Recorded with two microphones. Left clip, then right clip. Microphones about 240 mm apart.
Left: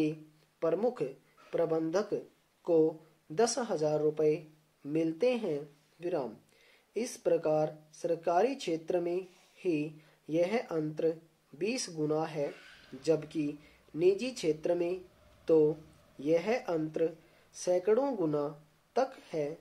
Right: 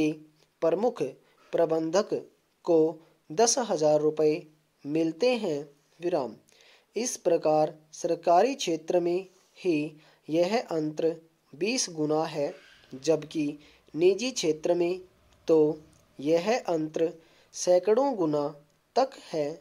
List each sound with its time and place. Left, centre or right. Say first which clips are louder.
0.0 s speech: right 5 dB; right